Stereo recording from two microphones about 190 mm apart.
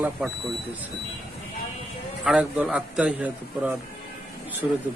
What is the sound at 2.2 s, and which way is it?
A man's voice, 5° right (ahead or behind).